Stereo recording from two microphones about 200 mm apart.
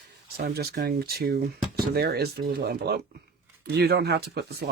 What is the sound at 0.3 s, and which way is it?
Speech, 50° right (ahead or behind).